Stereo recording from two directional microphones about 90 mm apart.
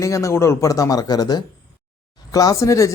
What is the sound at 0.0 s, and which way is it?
Speech, 35° left (ahead or behind).